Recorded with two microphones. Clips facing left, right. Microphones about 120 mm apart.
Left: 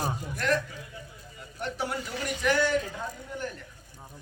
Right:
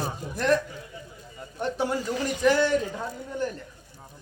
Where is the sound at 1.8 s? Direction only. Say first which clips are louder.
Right 5 dB; 35° right (ahead or behind).